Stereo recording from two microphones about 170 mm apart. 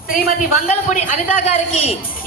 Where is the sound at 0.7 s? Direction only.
40° left (ahead or behind).